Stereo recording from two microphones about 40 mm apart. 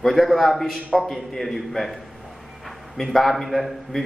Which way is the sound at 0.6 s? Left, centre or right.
Centre.